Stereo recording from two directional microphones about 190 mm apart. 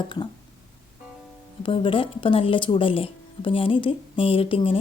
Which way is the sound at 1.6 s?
25° left (ahead or behind).